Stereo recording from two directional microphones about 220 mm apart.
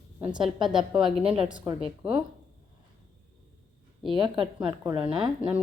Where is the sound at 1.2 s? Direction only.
25° right (ahead or behind).